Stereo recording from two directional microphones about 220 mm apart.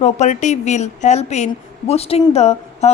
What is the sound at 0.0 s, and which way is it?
A woman's voice, 35° left (ahead or behind).